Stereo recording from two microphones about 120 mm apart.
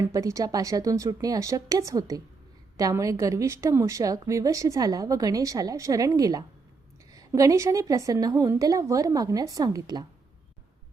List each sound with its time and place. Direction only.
0.0 s a woman's voice: 25° right (ahead or behind)